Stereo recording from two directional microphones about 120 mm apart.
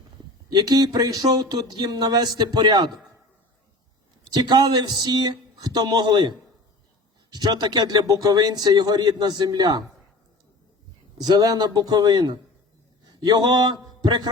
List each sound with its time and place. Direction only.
0.5 s a man's voice: 30° right (ahead or behind)
4.3 s a man's voice: 35° right (ahead or behind)
11.3 s a man's voice: 30° right (ahead or behind)